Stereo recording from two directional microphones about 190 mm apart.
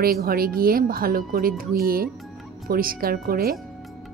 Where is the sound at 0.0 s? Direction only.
50° right (ahead or behind).